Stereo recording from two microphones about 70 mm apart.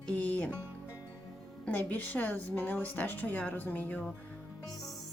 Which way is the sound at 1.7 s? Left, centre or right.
Left.